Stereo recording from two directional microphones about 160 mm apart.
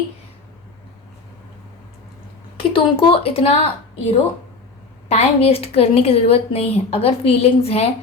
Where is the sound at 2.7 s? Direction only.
35° left (ahead or behind).